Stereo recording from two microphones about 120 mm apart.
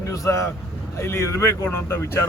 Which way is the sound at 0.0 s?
25° left (ahead or behind).